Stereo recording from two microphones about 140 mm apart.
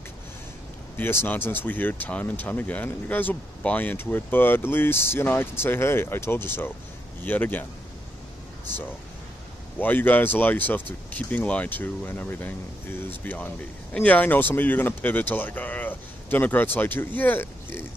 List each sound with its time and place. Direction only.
0.9 s speech: 15° left (ahead or behind)
9.8 s speech: 15° left (ahead or behind)